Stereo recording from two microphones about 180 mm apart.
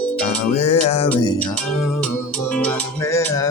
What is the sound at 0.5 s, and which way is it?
Music, 35° left (ahead or behind).